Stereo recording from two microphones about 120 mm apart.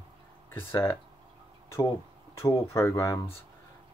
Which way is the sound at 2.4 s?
25° left (ahead or behind).